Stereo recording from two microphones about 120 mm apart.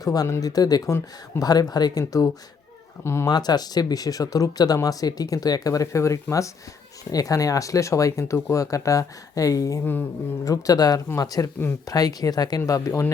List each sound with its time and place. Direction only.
0.0 s speech: 30° left (ahead or behind)
3.2 s speech: 35° left (ahead or behind)